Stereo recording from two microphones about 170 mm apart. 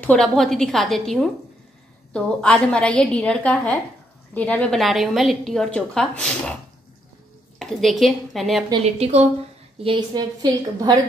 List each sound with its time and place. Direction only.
0.0 s a woman's voice: 5° left (ahead or behind)
7.5 s a woman's voice: centre (ahead or behind)
9.0 s a woman's voice: 40° right (ahead or behind)
9.8 s a woman's voice: 25° right (ahead or behind)